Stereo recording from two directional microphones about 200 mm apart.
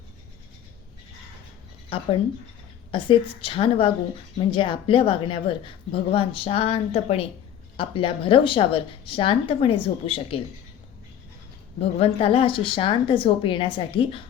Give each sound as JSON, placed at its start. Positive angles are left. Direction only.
{"t": 2.9, "sound": "a woman's voice", "side_deg": 25}
{"t": 11.8, "sound": "a woman's voice", "side_deg": 30}